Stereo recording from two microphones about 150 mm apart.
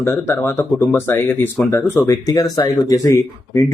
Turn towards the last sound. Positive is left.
turn(degrees=20)  # may be behind; listen again after turning